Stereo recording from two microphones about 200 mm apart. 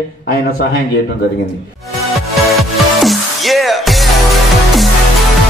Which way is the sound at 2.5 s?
Centre (ahead or behind).